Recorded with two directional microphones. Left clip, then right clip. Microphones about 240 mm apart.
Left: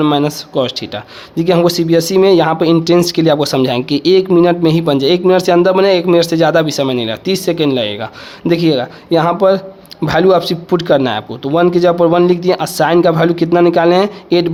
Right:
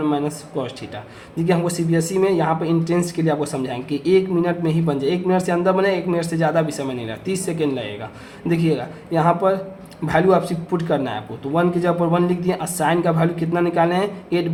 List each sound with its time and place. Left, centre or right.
0.0 s speech: left